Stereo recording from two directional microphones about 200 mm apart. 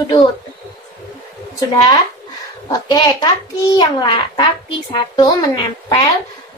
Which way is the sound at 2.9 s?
20° left (ahead or behind).